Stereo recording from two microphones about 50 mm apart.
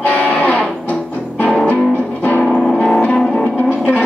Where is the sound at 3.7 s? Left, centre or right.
Left.